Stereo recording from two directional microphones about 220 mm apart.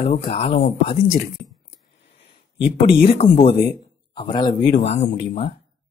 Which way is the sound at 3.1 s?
25° left (ahead or behind).